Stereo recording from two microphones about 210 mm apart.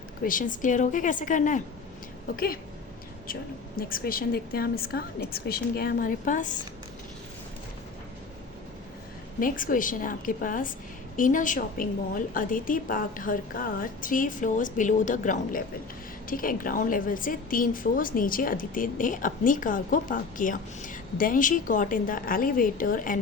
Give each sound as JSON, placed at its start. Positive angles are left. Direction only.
{"t": 0.3, "sound": "a woman's voice", "side_deg": 40}
{"t": 3.8, "sound": "a woman's voice", "side_deg": 45}
{"t": 9.4, "sound": "a woman's voice", "side_deg": 40}